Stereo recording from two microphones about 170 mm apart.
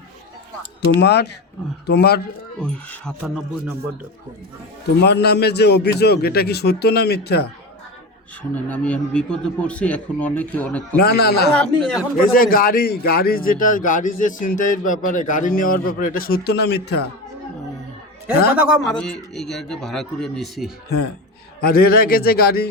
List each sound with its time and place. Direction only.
0.9 s a man's voice: 75° left (ahead or behind)
2.6 s a man's voice: 5° left (ahead or behind)
5.0 s a man's voice: 75° left (ahead or behind)
8.4 s a man's voice: 10° left (ahead or behind)
11.0 s a man's voice: 70° left (ahead or behind)
11.5 s a man's voice: 5° left (ahead or behind)
12.2 s a man's voice: 55° left (ahead or behind); by 17.0 s 75° left (ahead or behind)
18.8 s a man's voice: 5° left (ahead or behind)
20.7 s a man's voice: 75° left (ahead or behind)
21.6 s a man's voice: 60° left (ahead or behind)